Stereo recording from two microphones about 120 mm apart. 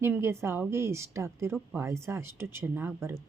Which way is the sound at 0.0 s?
20° right (ahead or behind).